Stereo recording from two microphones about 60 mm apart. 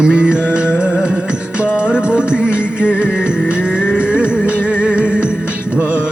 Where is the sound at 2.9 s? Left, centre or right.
Left.